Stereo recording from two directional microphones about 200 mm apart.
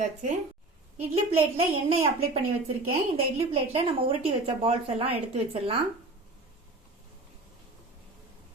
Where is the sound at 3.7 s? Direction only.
30° right (ahead or behind).